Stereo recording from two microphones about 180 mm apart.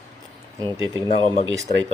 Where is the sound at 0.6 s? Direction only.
20° right (ahead or behind).